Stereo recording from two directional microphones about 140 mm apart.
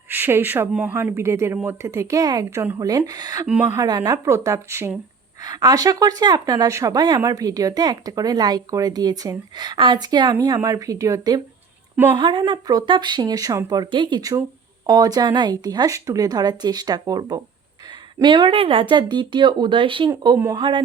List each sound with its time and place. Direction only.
0.1 s a woman's voice: 15° right (ahead or behind); by 20.8 s 35° right (ahead or behind)